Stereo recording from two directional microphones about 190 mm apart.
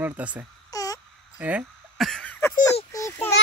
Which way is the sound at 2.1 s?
5° left (ahead or behind).